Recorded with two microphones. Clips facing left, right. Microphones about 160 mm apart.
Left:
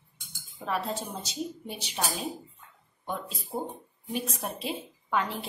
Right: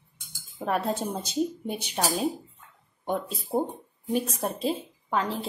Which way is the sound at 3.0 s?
50° right (ahead or behind).